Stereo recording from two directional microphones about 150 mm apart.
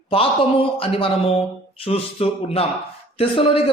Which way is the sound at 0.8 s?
40° left (ahead or behind).